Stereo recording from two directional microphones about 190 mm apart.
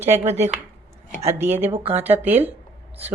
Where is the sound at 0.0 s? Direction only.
10° right (ahead or behind).